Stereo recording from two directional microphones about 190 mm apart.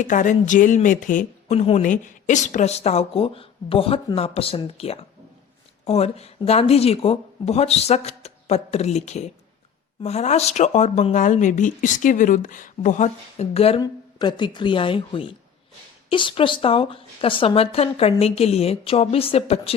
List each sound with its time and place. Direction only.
0.0 s speech: 40° left (ahead or behind)